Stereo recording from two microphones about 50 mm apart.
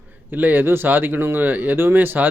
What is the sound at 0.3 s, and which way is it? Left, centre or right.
Speech, right.